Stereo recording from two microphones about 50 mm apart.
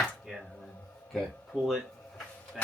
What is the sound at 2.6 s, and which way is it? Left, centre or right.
Speech, centre.